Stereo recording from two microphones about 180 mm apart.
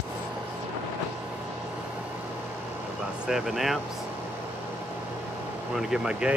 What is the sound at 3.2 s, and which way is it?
Speech, 5° right (ahead or behind).